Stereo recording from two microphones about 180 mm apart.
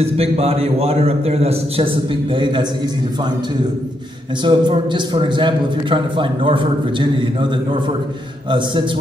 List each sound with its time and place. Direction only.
0.0 s a man's voice: 35° right (ahead or behind)
4.5 s a man's voice: 25° right (ahead or behind)
8.5 s a man's voice: 25° right (ahead or behind)